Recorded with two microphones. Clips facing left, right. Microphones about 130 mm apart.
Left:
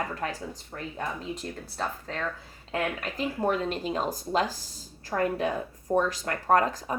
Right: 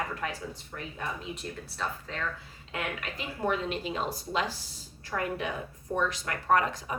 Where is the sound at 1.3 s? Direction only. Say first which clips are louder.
Left 3 dB; 40° left (ahead or behind).